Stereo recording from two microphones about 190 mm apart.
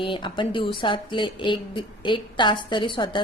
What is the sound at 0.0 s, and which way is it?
Speech, 25° left (ahead or behind).